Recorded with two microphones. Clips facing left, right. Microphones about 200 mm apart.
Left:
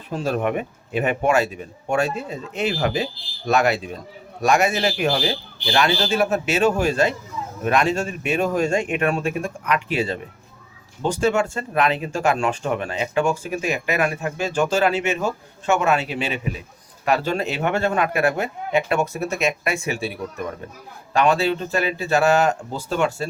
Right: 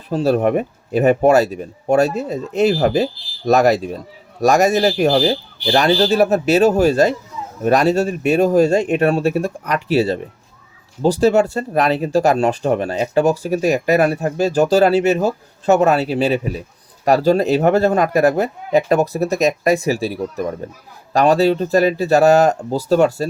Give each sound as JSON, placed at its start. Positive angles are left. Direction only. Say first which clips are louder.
{"t": 0.1, "sound": "speech", "louder": "right 7 dB", "side_deg": -35}